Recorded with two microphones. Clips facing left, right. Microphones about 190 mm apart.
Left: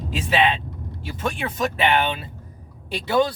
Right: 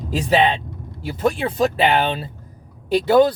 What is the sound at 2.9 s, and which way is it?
Speech, 45° right (ahead or behind).